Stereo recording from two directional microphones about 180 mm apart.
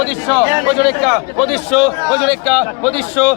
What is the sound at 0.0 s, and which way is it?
A man's voice, 5° right (ahead or behind).